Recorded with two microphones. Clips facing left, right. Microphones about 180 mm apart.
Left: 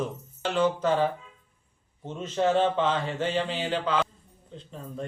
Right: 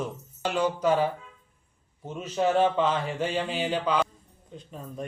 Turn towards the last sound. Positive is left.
turn(degrees=-10)  # may be behind; listen again after turning